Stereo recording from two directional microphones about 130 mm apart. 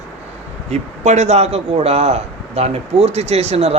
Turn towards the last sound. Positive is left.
turn(degrees=-55)  # may be behind; listen again after turning